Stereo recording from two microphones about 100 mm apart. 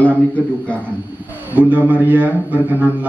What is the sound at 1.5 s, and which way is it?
A man's voice, 15° right (ahead or behind).